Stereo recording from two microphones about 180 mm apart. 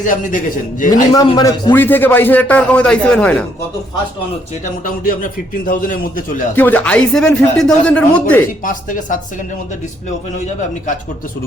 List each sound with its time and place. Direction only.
0.0 s a man's voice: 45° left (ahead or behind)
1.3 s a man's voice: 20° left (ahead or behind); by 3.3 s 5° left (ahead or behind)
4.6 s a man's voice: 50° left (ahead or behind)
6.6 s a man's voice: 10° left (ahead or behind)
8.6 s a man's voice: 45° left (ahead or behind)